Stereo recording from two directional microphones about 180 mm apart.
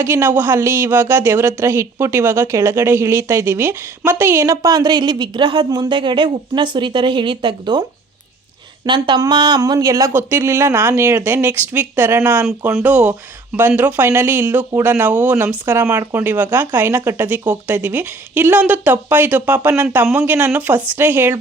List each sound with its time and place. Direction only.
0.0 s speech: 15° right (ahead or behind)